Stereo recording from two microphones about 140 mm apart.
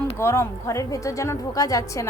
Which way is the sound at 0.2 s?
20° left (ahead or behind).